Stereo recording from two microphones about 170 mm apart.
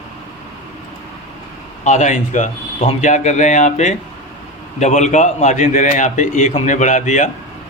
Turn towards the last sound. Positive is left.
turn(degrees=45)  # may be behind; listen again after turning